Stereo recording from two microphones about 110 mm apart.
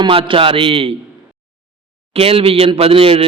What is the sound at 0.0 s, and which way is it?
Speech, 55° right (ahead or behind).